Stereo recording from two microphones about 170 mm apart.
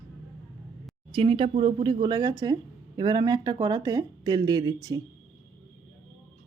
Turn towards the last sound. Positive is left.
turn(degrees=-20)  # may be behind; listen again after turning